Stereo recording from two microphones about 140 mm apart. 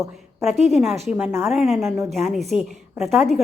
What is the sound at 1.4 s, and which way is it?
Speech, centre (ahead or behind).